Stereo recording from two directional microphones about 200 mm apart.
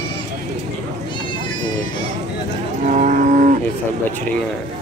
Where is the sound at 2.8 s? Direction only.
40° right (ahead or behind).